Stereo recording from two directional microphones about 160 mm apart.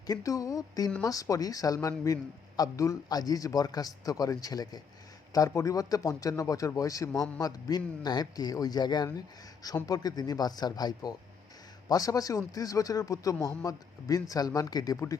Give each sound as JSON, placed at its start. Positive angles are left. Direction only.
{"t": 0.1, "sound": "a man's voice", "side_deg": 20}